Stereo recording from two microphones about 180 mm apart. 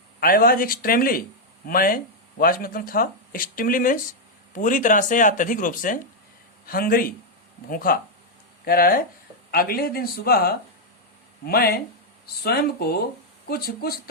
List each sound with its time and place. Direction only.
0.2 s speech: 55° left (ahead or behind)